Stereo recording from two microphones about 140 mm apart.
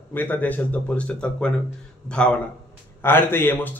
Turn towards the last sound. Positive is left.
turn(degrees=15)  # may be behind; listen again after turning